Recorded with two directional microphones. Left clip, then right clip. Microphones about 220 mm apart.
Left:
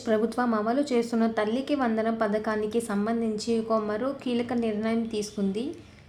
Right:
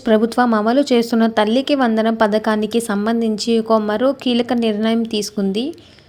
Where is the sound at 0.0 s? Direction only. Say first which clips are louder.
Right 11 dB; 35° right (ahead or behind).